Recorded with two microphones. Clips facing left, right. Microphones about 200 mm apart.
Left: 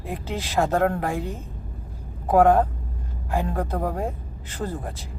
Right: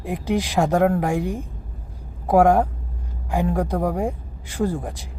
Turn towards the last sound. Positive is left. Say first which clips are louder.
# right 6 dB
turn(degrees=-15)  # may be behind; listen again after turning